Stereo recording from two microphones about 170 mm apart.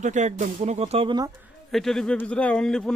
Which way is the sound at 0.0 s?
45° right (ahead or behind).